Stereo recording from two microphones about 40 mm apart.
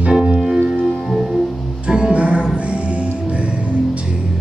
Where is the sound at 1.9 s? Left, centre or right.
Right.